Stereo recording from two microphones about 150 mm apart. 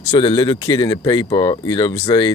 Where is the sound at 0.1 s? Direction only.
30° left (ahead or behind).